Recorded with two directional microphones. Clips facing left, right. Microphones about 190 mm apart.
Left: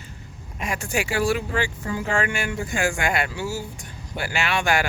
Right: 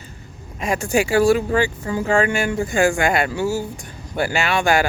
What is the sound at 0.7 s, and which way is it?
Speech, 40° right (ahead or behind).